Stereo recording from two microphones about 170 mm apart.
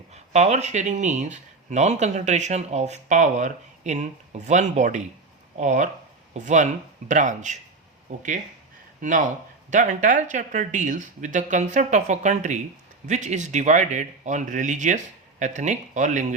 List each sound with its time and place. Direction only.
0.1 s speech: 40° right (ahead or behind)